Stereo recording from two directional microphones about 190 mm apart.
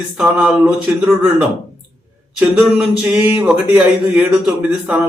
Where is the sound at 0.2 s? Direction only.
5° right (ahead or behind).